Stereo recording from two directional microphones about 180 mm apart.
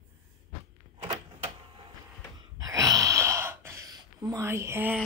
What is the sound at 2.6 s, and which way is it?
Gasp, 20° right (ahead or behind).